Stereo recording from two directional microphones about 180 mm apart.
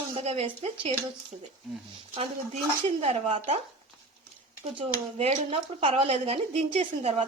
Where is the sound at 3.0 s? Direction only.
40° right (ahead or behind).